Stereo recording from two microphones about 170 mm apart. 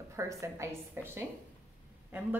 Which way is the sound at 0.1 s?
20° right (ahead or behind).